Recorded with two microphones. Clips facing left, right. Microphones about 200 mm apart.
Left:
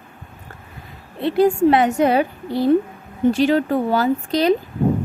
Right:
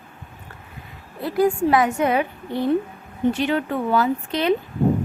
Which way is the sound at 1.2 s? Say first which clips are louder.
Left 4 dB; 30° left (ahead or behind).